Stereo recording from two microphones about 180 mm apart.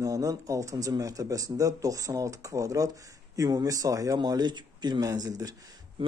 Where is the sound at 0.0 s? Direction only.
20° right (ahead or behind).